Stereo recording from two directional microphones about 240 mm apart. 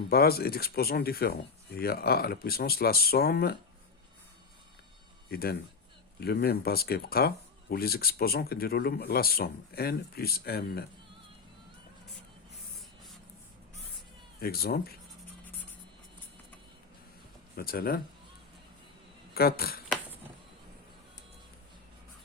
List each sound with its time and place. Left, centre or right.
0.1 s speech: left
5.3 s speech: left
14.4 s speech: left
17.6 s speech: left
19.3 s speech: left